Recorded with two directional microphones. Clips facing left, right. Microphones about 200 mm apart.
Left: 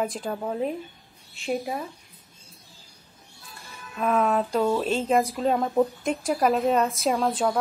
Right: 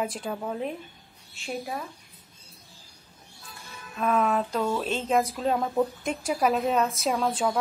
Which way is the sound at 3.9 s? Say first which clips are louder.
Left 2 dB; 5° left (ahead or behind).